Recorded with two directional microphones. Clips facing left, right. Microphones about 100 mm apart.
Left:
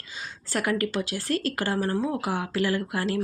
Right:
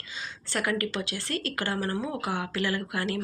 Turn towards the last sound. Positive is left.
turn(degrees=40)  # may be behind; listen again after turning